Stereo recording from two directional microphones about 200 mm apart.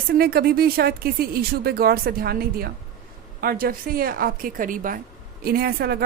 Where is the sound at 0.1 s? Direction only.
50° right (ahead or behind).